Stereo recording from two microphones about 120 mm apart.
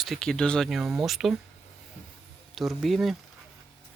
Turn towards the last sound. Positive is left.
turn(degrees=0)  # may be behind; listen again after turning